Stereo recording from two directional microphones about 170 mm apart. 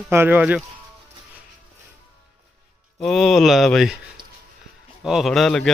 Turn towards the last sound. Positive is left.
turn(degrees=5)  # may be behind; listen again after turning